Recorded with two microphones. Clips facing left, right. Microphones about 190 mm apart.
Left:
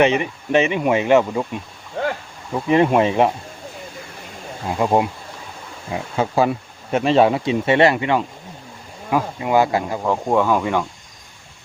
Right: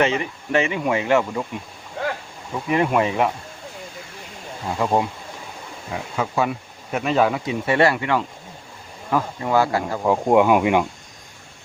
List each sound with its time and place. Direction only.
0.0 s speech: 20° left (ahead or behind)
2.6 s speech: 25° left (ahead or behind)
4.8 s speech: 15° left (ahead or behind)
5.9 s speech: 30° left (ahead or behind)
10.0 s speech: 15° right (ahead or behind)